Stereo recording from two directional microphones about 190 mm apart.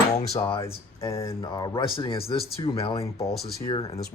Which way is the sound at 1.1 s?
15° left (ahead or behind).